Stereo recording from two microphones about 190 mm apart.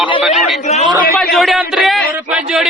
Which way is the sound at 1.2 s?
Centre (ahead or behind).